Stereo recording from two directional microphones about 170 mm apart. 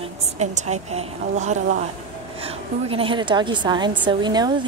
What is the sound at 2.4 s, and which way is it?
Speech, 35° right (ahead or behind).